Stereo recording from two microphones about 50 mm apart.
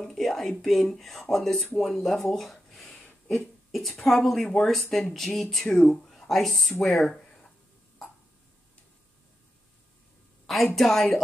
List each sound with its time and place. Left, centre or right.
0.0 s speech: centre
2.7 s a sound: centre
3.7 s speech: centre
5.8 s speech: centre
6.0 s speech: centre
10.4 s a woman's voice: centre